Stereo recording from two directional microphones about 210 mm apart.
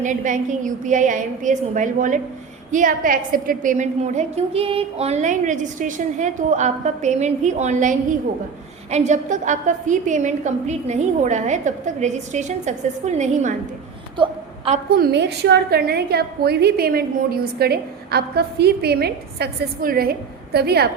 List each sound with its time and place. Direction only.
0.0 s a woman's voice: 35° right (ahead or behind)
14.2 s a sound: 25° right (ahead or behind)
14.8 s a woman's voice: 45° right (ahead or behind)